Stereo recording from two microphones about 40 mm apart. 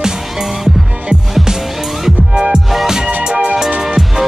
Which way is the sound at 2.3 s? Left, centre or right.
Centre.